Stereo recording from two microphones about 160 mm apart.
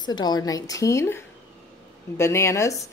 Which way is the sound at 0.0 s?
25° left (ahead or behind).